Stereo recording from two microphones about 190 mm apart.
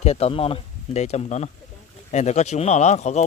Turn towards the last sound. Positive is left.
turn(degrees=35)  # may be behind; listen again after turning